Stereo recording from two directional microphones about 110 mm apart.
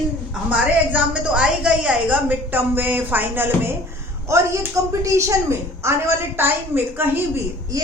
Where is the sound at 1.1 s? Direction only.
10° right (ahead or behind).